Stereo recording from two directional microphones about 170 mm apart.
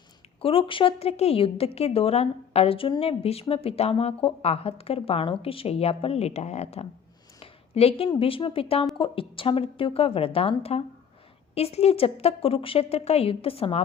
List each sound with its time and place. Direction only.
0.4 s a woman's voice: 30° left (ahead or behind)